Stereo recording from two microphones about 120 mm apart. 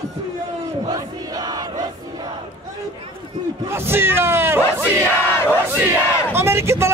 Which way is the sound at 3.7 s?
20° right (ahead or behind).